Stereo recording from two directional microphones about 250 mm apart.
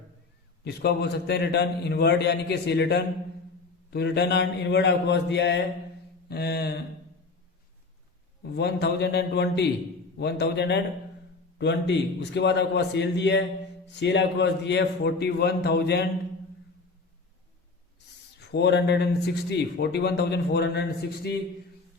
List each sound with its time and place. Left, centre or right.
0.6 s a man's voice: left
8.5 s a man's voice: left
18.3 s a man's voice: left